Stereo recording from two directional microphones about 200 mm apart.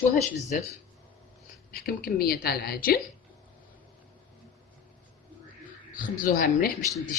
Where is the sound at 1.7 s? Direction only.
50° left (ahead or behind).